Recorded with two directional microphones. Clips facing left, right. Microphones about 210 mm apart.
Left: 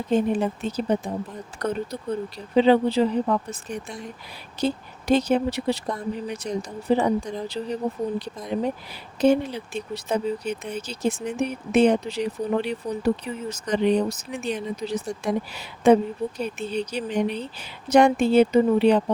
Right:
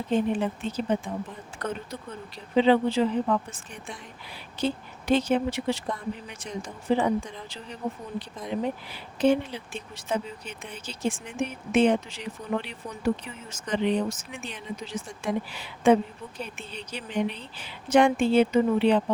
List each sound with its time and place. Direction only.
0.1 s speech: 40° left (ahead or behind)